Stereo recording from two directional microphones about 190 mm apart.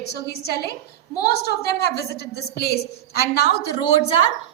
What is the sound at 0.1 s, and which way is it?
A woman's voice, 60° left (ahead or behind).